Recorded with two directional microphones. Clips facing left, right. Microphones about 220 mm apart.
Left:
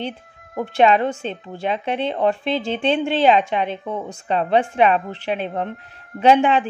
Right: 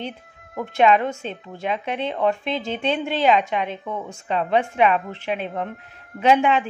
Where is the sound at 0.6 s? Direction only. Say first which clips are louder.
Left 2 dB; 30° left (ahead or behind).